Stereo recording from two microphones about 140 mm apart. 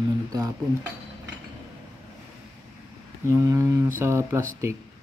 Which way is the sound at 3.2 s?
20° right (ahead or behind).